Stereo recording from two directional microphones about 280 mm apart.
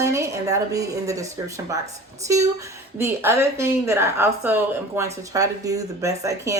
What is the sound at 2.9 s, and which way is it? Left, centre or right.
Speech, centre.